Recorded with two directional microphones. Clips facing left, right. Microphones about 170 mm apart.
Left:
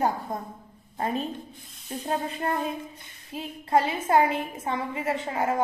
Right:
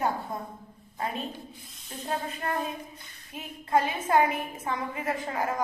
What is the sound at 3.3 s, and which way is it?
A woman's voice, 30° left (ahead or behind).